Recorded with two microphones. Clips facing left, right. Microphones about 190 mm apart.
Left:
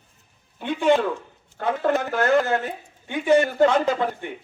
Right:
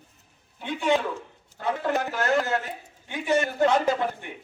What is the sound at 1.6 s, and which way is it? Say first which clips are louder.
Speech: left 4 dB; 55° left (ahead or behind).